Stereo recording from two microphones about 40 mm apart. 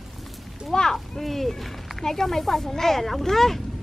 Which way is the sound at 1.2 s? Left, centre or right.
Centre.